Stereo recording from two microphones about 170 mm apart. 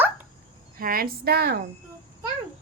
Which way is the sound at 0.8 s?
60° right (ahead or behind).